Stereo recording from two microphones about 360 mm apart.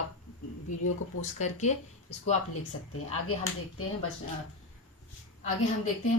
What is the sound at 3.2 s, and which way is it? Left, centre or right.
Speech, left.